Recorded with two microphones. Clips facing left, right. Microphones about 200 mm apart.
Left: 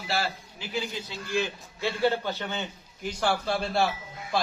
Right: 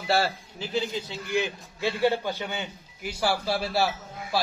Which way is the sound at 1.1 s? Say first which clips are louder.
Even; 20° right (ahead or behind).